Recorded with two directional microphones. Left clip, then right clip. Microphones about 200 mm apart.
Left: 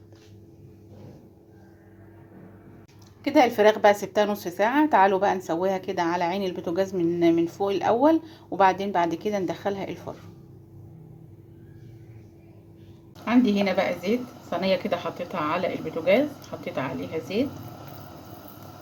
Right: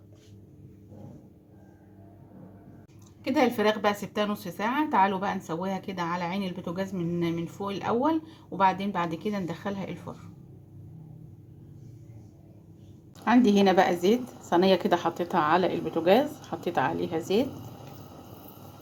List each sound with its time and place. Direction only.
3.2 s a woman's voice: 25° left (ahead or behind)
13.2 s a woman's voice: 35° right (ahead or behind)